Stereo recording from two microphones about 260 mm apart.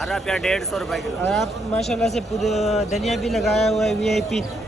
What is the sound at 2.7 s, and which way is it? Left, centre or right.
Speech, centre.